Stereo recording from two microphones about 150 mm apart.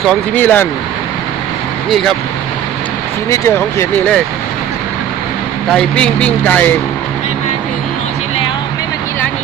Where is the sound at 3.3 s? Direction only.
20° left (ahead or behind).